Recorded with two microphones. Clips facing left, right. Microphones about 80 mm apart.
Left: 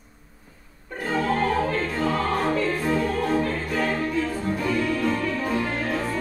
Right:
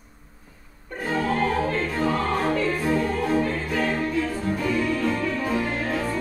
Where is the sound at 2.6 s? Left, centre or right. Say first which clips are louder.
Even; centre.